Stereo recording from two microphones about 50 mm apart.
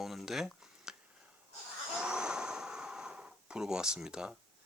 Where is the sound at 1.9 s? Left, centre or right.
Centre.